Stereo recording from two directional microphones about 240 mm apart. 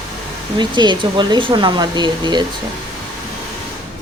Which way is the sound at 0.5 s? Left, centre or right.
Centre.